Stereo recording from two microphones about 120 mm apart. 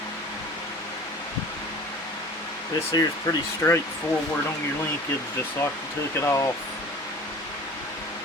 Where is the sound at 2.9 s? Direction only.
25° left (ahead or behind).